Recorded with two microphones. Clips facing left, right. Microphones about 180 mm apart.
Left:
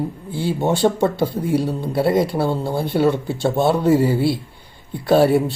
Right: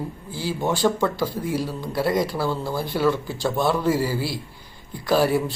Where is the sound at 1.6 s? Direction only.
25° left (ahead or behind).